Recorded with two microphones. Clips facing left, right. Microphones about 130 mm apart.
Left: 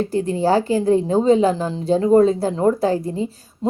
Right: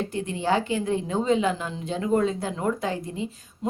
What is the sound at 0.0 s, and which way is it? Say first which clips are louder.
A woman's voice: left 8 dB; 35° left (ahead or behind).